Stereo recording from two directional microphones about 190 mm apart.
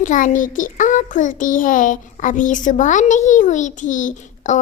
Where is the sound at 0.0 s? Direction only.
45° left (ahead or behind).